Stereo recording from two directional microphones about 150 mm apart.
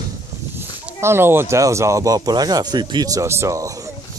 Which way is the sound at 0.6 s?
15° right (ahead or behind).